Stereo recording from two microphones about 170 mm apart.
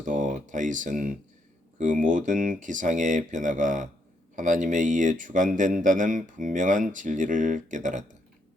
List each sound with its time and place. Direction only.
0.0 s speech: 50° right (ahead or behind)